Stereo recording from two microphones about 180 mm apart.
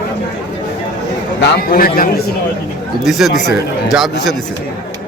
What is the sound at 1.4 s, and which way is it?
Speech, 60° left (ahead or behind).